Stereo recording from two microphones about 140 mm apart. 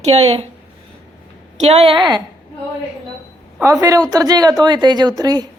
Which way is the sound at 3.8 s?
25° right (ahead or behind).